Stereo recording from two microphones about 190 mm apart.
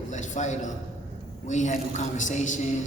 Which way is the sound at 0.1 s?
40° left (ahead or behind).